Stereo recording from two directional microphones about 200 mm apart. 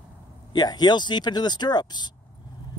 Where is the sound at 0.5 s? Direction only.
20° left (ahead or behind).